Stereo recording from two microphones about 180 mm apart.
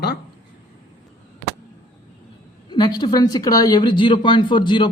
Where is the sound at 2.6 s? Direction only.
25° left (ahead or behind).